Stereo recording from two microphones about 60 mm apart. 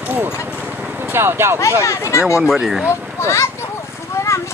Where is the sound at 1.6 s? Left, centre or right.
Left.